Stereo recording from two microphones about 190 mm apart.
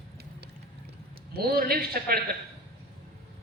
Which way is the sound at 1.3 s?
55° right (ahead or behind).